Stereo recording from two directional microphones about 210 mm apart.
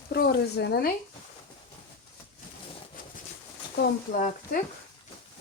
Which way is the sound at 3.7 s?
45° left (ahead or behind).